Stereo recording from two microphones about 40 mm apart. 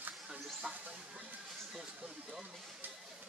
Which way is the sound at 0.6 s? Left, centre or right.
Centre.